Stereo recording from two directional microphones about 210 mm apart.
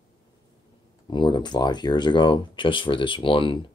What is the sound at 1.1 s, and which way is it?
Speech, 20° left (ahead or behind).